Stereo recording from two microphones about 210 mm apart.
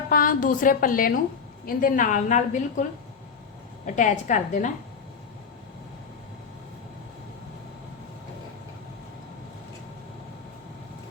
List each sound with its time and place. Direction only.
0.1 s a woman's voice: 40° left (ahead or behind)
3.8 s a woman's voice: 35° left (ahead or behind)